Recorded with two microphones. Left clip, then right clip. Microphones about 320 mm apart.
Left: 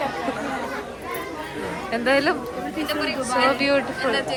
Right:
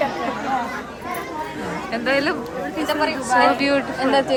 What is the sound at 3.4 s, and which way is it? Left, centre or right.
Speech, centre.